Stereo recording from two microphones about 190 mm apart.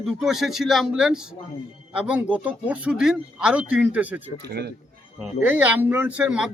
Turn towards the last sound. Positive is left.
turn(degrees=-5)  # may be behind; listen again after turning